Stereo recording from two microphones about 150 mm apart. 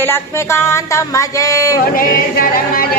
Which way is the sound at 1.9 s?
70° left (ahead or behind).